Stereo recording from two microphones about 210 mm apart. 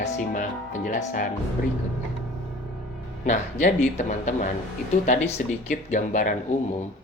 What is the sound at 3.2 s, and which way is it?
Speech, 35° left (ahead or behind).